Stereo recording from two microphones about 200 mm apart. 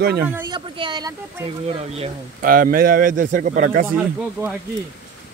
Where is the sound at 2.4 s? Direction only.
45° right (ahead or behind).